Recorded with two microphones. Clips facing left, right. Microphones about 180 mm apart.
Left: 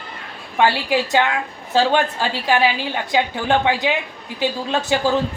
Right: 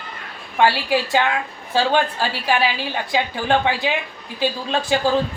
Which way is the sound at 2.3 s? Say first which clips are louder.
Left 2 dB; 20° left (ahead or behind).